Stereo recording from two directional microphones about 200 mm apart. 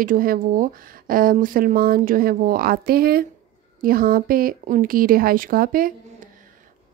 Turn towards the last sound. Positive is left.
turn(degrees=-45)  # may be behind; listen again after turning